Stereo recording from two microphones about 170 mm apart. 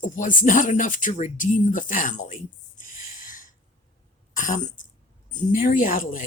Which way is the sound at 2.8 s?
50° left (ahead or behind).